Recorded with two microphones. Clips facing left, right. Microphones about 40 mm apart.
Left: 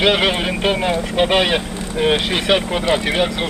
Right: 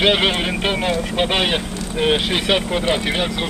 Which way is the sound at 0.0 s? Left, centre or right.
Centre.